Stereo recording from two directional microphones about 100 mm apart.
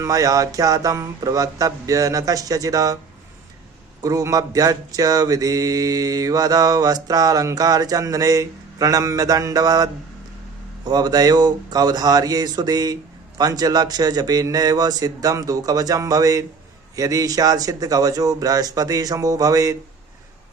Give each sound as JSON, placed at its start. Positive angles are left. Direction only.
{"t": 0.0, "sound": "mantra", "side_deg": -35}
{"t": 4.0, "sound": "mantra", "side_deg": -35}